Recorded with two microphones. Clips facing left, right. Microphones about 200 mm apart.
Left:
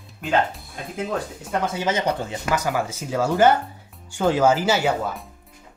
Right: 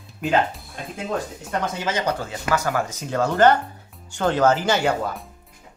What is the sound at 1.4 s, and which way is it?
Speech, 10° left (ahead or behind).